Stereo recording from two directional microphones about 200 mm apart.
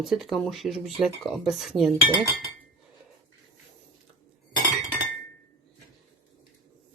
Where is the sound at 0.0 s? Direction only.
Centre (ahead or behind).